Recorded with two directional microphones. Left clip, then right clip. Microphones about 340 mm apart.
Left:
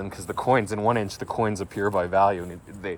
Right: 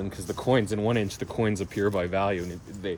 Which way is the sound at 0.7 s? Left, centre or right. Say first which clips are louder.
Left 3 dB; centre.